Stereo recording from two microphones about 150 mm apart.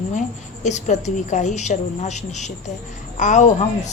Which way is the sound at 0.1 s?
55° left (ahead or behind).